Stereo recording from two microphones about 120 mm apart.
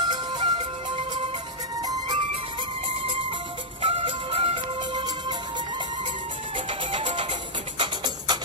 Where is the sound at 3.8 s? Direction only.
50° right (ahead or behind).